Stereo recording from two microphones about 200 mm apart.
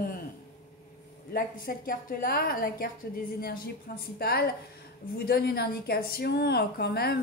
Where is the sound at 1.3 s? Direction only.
45° left (ahead or behind).